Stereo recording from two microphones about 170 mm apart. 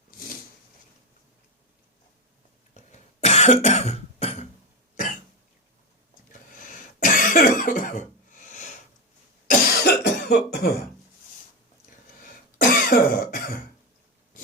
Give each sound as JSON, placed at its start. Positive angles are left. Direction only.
{"t": 2.9, "sound": "cough", "side_deg": 40}
{"t": 6.6, "sound": "cough", "side_deg": 50}
{"t": 9.5, "sound": "cough", "side_deg": 70}
{"t": 12.5, "sound": "cough", "side_deg": 55}